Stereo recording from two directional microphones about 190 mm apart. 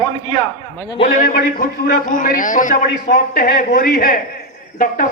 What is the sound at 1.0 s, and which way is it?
A man's voice, 45° left (ahead or behind).